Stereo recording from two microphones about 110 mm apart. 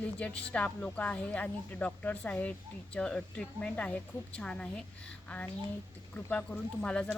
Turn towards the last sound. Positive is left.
turn(degrees=10)  # may be behind; listen again after turning